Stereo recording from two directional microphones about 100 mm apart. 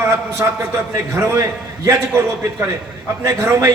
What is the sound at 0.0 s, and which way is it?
A man's voice, 25° right (ahead or behind).